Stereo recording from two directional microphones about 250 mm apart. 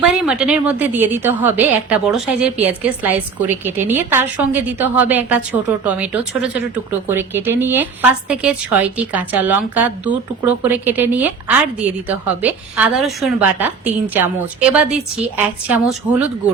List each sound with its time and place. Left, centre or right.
0.0 s a woman's voice: centre